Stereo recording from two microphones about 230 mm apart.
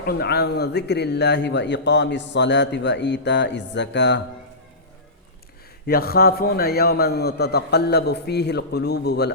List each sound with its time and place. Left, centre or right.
0.0 s a man's voice: left
5.8 s a man's voice: left